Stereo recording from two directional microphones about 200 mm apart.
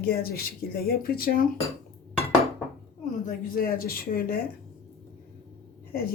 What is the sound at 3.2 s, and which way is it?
A woman's voice, 45° left (ahead or behind).